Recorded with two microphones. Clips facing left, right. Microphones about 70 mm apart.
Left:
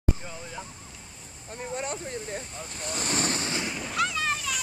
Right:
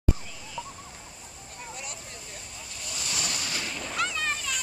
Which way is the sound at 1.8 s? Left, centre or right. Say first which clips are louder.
Left 9 dB; left.